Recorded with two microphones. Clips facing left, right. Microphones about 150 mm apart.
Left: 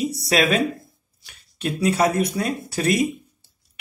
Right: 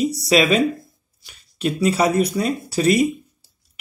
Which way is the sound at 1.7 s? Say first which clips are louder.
Right 1 dB; 5° right (ahead or behind).